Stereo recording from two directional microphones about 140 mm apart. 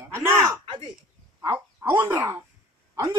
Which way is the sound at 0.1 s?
15° right (ahead or behind).